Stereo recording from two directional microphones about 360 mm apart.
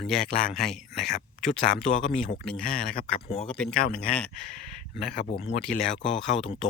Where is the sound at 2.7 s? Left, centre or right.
Left.